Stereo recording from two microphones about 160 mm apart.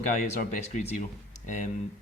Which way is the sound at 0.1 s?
55° left (ahead or behind).